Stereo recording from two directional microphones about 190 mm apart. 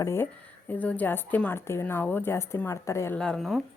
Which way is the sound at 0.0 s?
15° left (ahead or behind).